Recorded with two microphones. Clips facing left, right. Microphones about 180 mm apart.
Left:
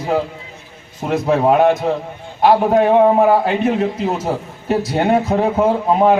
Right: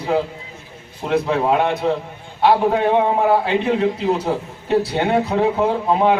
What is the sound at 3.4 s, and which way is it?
A man's voice, 45° left (ahead or behind).